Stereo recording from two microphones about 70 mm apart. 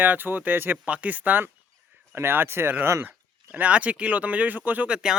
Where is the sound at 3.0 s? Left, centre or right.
Right.